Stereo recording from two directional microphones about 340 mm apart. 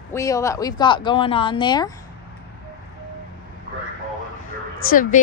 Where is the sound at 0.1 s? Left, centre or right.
Centre.